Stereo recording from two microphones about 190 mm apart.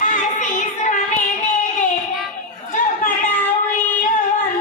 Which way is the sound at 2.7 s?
40° left (ahead or behind).